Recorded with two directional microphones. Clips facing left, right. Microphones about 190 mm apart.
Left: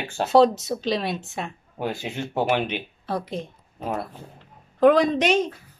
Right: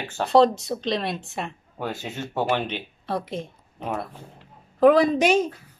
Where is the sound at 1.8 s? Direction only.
10° left (ahead or behind).